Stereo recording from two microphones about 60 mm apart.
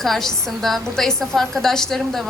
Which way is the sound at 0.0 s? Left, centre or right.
Centre.